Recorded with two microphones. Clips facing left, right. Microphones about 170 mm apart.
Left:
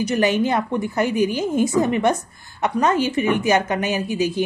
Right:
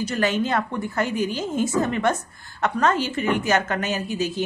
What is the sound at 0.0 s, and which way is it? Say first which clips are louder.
A woman's voice: left 4 dB; 15° left (ahead or behind).